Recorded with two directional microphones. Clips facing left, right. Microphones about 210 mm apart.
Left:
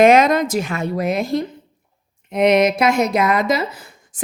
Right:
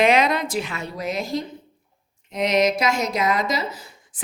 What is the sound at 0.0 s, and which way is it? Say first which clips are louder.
A woman's voice: left 6 dB; 45° left (ahead or behind).